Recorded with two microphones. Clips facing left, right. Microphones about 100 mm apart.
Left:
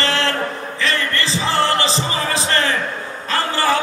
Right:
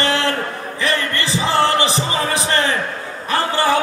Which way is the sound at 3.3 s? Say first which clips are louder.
Right 1 dB; 20° right (ahead or behind).